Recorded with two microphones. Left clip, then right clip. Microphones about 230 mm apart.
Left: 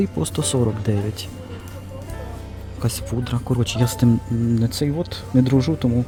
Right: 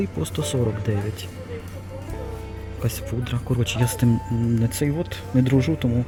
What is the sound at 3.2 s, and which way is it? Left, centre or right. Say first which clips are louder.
Speech: left 2 dB; centre.